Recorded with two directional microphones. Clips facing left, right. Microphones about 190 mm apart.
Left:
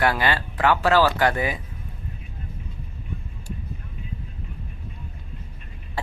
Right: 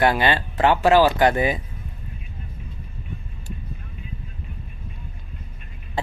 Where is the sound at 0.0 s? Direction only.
20° right (ahead or behind).